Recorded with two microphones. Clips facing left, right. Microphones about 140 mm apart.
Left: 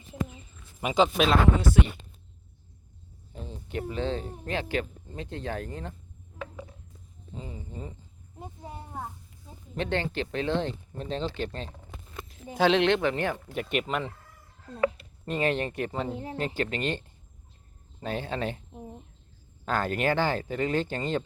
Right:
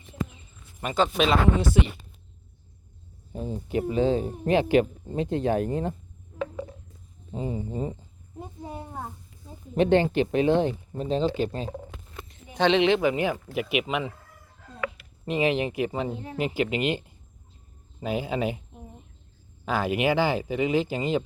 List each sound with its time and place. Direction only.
0.8 s speech: 10° left (ahead or behind)
3.4 s speech: 10° right (ahead or behind)
7.3 s speech: 25° right (ahead or behind)
9.7 s speech: 15° right (ahead or behind)
12.5 s speech: centre (ahead or behind)
14.8 s speech: 35° left (ahead or behind)
15.2 s speech: 10° right (ahead or behind)
19.6 s speech: 10° right (ahead or behind)